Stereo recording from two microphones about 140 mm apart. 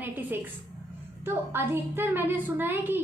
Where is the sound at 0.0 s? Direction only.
15° right (ahead or behind).